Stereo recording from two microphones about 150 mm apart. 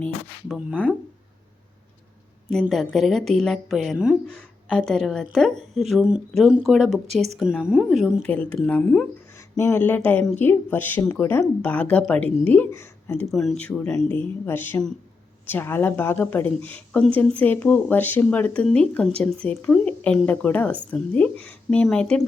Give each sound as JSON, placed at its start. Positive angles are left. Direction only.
{"t": 0.4, "sound": "speech", "side_deg": -5}
{"t": 2.5, "sound": "a woman's voice", "side_deg": 0}
{"t": 7.1, "sound": "a woman's voice", "side_deg": -45}
{"t": 7.3, "sound": "a woman's voice", "side_deg": -5}
{"t": 8.2, "sound": "speech", "side_deg": 10}
{"t": 9.3, "sound": "speech", "side_deg": 20}
{"t": 13.3, "sound": "speech", "side_deg": 0}